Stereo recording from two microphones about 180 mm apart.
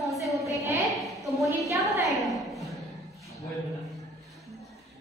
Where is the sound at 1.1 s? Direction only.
Centre (ahead or behind).